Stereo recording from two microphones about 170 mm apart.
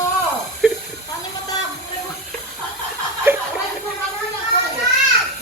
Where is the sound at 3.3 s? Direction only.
15° right (ahead or behind).